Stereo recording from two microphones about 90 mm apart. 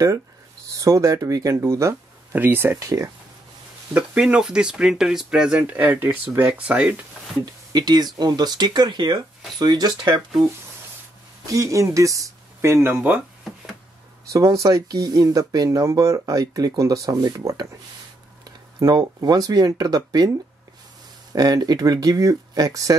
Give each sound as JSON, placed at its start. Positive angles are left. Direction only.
{"t": 0.7, "sound": "speech", "side_deg": -40}
{"t": 2.3, "sound": "speech", "side_deg": -20}
{"t": 2.8, "sound": "speech", "side_deg": -35}
{"t": 3.9, "sound": "speech", "side_deg": -15}
{"t": 7.7, "sound": "speech", "side_deg": -50}
{"t": 11.4, "sound": "speech", "side_deg": -35}
{"t": 14.3, "sound": "speech", "side_deg": -40}
{"t": 21.4, "sound": "speech", "side_deg": -45}